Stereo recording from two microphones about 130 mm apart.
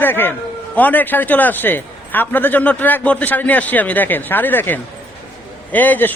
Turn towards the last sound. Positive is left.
turn(degrees=15)  # may be behind; listen again after turning